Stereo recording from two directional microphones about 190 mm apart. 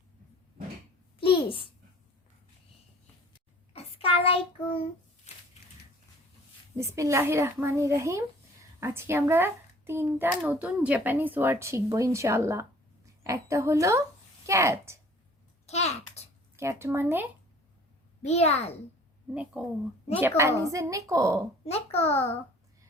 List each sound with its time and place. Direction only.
1.2 s a sound: 30° left (ahead or behind)
3.7 s child singing: 30° left (ahead or behind)
6.7 s a child's voice: 15° right (ahead or behind)
15.6 s a sound: 35° left (ahead or behind)
16.6 s a child's voice: 15° right (ahead or behind)
18.2 s a child's voice: 35° left (ahead or behind)
19.3 s a child's voice: 5° right (ahead or behind)
21.6 s a child's voice: 30° left (ahead or behind)